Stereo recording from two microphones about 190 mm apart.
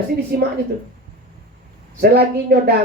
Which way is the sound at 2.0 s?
55° right (ahead or behind).